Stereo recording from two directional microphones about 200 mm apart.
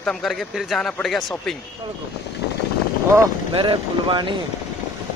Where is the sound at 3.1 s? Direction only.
25° right (ahead or behind).